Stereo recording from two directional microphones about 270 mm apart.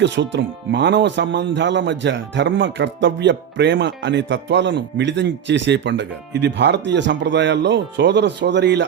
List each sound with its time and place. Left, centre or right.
0.0 s speech: right